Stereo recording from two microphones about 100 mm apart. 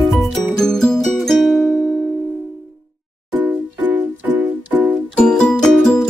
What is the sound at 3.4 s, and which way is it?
Music, 20° right (ahead or behind).